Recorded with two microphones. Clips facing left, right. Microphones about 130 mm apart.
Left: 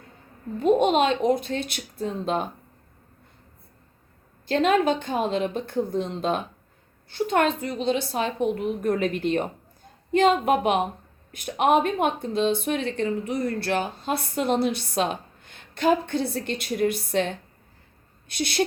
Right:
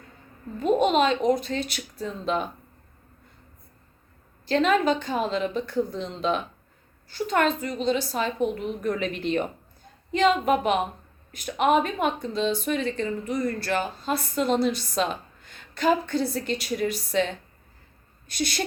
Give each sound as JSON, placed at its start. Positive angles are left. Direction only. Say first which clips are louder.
{"t": 0.8, "sound": "speech", "louder": "left 1 dB", "side_deg": 50}
{"t": 4.4, "sound": "a woman's voice", "louder": "left 1 dB", "side_deg": 45}